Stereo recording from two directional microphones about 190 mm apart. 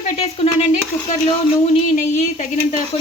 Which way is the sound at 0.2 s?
35° left (ahead or behind).